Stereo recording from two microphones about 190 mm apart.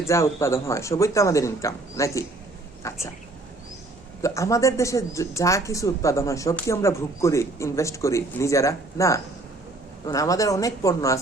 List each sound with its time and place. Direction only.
0.1 s speech: 15° left (ahead or behind)
4.2 s speech: 15° left (ahead or behind)